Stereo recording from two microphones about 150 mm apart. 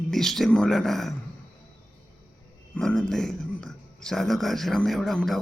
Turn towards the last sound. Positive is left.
turn(degrees=0)  # may be behind; listen again after turning